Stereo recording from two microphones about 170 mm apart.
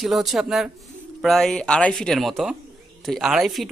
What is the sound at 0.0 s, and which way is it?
Speech, centre (ahead or behind).